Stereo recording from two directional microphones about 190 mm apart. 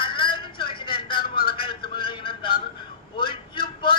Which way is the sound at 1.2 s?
50° left (ahead or behind).